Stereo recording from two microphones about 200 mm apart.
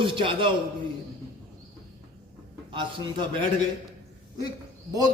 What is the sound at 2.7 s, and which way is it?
Speech, 25° right (ahead or behind).